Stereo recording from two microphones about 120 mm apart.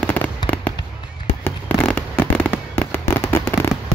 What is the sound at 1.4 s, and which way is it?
Fireworks, 15° left (ahead or behind).